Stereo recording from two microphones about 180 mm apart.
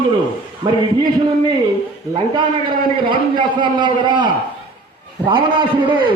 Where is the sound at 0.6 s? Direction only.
25° right (ahead or behind).